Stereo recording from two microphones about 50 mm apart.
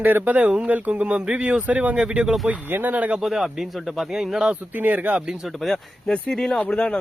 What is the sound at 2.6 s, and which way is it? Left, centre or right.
Speech, right.